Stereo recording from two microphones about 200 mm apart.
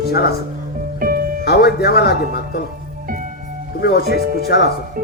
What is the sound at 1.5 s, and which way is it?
Speech, 50° left (ahead or behind).